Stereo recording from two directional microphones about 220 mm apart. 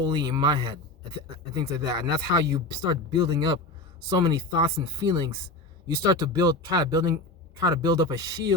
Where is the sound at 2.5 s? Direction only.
20° right (ahead or behind).